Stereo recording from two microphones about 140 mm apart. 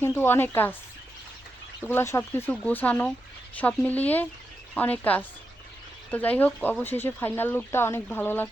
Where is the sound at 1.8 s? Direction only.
15° left (ahead or behind).